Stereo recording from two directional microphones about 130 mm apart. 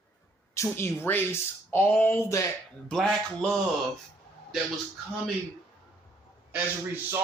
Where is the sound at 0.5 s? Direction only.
20° left (ahead or behind).